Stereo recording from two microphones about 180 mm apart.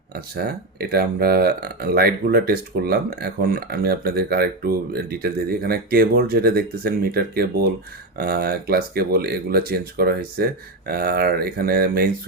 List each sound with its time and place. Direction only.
0.1 s speech: 60° right (ahead or behind)